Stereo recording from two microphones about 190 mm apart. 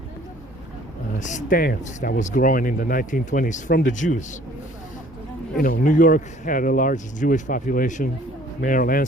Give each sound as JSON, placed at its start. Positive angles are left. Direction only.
{"t": 1.2, "sound": "speech", "side_deg": 40}
{"t": 3.9, "sound": "a man's voice", "side_deg": 40}
{"t": 5.5, "sound": "speech", "side_deg": 50}